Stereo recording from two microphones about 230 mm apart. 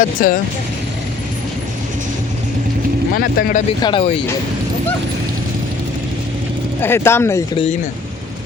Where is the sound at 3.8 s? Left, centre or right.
Left.